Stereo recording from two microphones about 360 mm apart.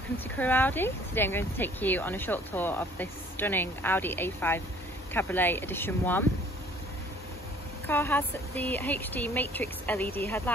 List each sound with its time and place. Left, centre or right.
0.4 s speech: centre
7.8 s speech: centre